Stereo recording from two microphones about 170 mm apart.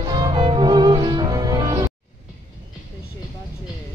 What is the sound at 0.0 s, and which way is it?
Cello, 25° right (ahead or behind).